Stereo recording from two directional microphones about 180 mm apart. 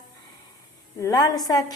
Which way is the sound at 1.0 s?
20° left (ahead or behind).